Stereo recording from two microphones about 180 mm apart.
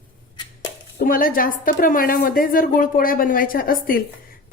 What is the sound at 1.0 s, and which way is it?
A woman's voice, 55° left (ahead or behind).